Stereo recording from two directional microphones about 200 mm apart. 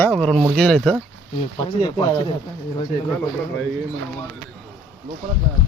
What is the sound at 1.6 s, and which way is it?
Speech, 20° left (ahead or behind).